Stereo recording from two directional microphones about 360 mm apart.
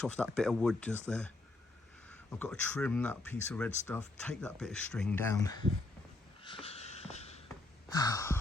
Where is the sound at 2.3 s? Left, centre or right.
Centre.